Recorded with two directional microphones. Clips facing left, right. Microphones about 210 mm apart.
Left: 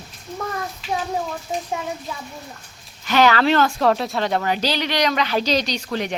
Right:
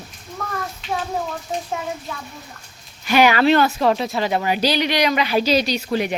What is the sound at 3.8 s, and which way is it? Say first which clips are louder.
Speech: even; centre (ahead or behind).